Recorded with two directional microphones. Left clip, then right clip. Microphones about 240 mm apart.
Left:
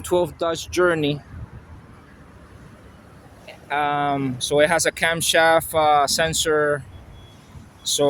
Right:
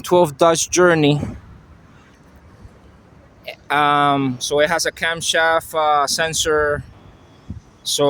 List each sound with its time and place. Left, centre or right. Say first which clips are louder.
0.0 s speech: right 8 dB; centre
3.4 s speech: right 6 dB; centre